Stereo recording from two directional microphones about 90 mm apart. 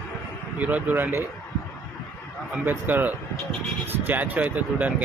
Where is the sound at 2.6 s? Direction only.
20° right (ahead or behind).